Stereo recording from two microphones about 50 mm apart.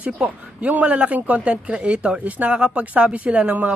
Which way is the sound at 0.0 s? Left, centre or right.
Right.